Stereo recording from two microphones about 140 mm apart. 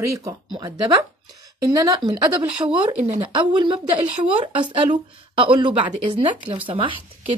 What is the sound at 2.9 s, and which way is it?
Speech, 50° right (ahead or behind).